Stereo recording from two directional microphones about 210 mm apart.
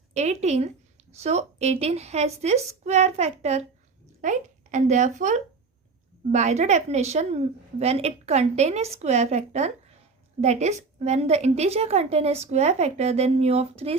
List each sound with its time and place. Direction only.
0.1 s a woman's voice: 30° right (ahead or behind)